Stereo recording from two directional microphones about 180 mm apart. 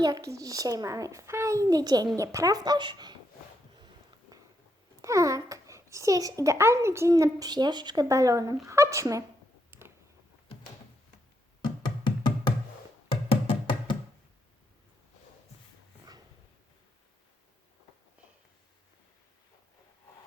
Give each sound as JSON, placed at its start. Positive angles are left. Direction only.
{"t": 0.0, "sound": "a child's voice", "side_deg": -20}
{"t": 5.0, "sound": "a child's voice", "side_deg": -20}
{"t": 9.7, "sound": "a sound", "side_deg": -10}
{"t": 11.6, "sound": "music", "side_deg": 25}